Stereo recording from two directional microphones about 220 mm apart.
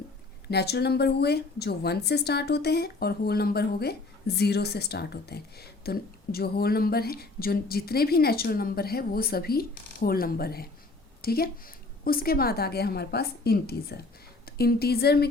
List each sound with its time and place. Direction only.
0.4 s speech: 50° left (ahead or behind)